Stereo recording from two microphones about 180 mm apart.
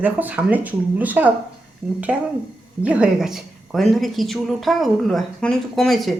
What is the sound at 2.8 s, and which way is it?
Speech, 5° right (ahead or behind).